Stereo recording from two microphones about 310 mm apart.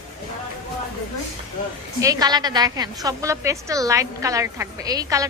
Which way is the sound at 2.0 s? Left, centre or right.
Centre.